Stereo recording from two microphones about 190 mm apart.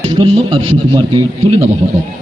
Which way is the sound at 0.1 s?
25° right (ahead or behind).